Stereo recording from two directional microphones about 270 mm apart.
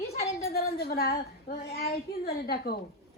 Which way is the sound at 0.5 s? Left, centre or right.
Left.